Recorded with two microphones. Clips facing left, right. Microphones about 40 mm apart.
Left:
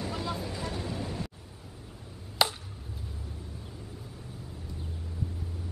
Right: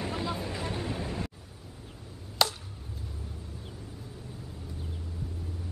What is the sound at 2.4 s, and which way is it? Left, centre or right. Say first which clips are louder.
Chop: even; centre.